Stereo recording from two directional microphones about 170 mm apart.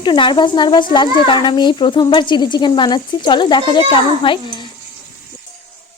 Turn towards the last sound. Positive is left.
turn(degrees=30)  # may be behind; listen again after turning